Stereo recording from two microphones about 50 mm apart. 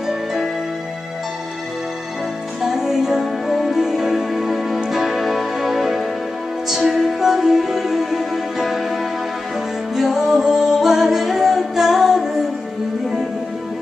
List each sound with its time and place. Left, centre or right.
0.0 s music: centre
2.6 s music: centre